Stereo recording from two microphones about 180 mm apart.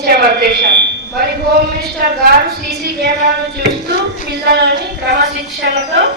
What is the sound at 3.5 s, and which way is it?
A woman's voice, 70° right (ahead or behind).